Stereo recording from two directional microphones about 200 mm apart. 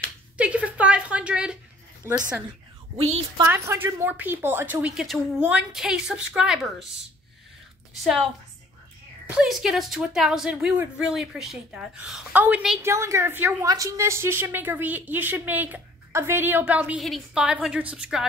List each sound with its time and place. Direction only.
0.4 s a sound: 5° right (ahead or behind)
2.0 s speech: 20° right (ahead or behind)
3.4 s a woman's voice: 10° right (ahead or behind)
9.3 s a woman's voice: 5° right (ahead or behind)